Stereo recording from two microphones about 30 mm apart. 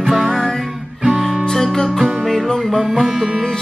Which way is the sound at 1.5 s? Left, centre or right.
Centre.